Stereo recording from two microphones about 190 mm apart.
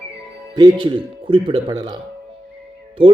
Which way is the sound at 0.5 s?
20° right (ahead or behind).